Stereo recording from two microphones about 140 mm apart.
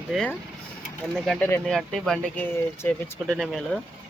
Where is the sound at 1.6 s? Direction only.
Centre (ahead or behind).